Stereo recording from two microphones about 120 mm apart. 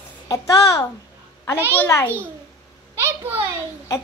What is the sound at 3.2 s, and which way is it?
Speech, 20° right (ahead or behind).